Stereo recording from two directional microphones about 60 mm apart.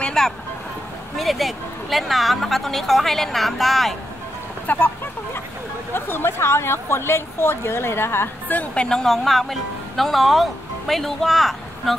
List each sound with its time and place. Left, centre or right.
0.0 s vehicle: centre
1.1 s a woman's voice: centre
4.6 s speech: left
5.9 s speech: left
8.7 s speech: centre